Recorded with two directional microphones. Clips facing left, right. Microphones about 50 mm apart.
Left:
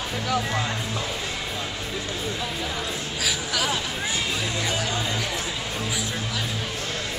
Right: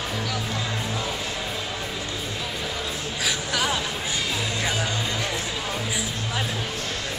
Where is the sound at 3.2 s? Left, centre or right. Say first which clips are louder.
Right 1 dB; centre.